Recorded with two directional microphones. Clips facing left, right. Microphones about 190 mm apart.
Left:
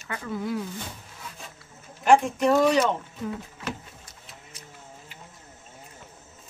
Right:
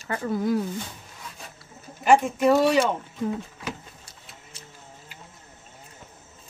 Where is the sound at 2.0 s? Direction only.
5° right (ahead or behind).